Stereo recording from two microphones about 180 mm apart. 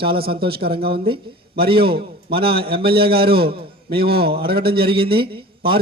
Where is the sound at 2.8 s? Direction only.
60° right (ahead or behind).